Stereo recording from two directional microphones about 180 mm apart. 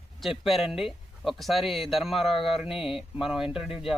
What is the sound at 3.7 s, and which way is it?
Speech, 30° left (ahead or behind).